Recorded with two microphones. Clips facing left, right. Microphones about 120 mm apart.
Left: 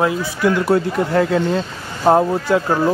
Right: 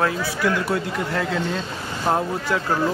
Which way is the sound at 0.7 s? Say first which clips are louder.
Left 8 dB; 35° left (ahead or behind).